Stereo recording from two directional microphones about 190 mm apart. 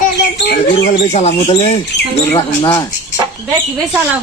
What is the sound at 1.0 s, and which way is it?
A child's voice, 35° left (ahead or behind).